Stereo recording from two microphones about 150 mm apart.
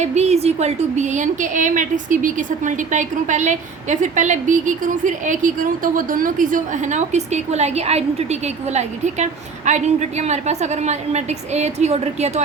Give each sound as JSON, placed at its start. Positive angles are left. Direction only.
{"t": 0.0, "sound": "a woman's voice", "side_deg": -50}